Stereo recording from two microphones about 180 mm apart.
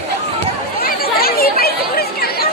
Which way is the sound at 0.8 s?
55° left (ahead or behind).